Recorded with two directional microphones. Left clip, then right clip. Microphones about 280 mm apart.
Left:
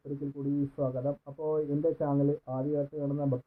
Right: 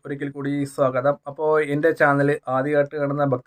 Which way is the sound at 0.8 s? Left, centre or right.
Right.